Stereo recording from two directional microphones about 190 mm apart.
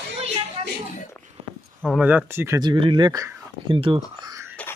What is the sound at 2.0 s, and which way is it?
Speech, 10° right (ahead or behind).